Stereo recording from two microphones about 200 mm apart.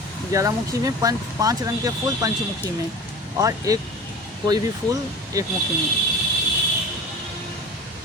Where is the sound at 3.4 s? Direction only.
15° right (ahead or behind).